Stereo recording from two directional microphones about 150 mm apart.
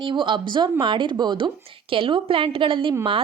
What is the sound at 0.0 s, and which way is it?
A woman's voice, 30° right (ahead or behind).